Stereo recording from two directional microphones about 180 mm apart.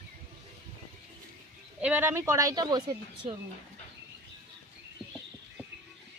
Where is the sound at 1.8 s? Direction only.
10° right (ahead or behind).